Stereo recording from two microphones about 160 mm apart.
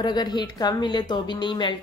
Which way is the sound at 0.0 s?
25° left (ahead or behind).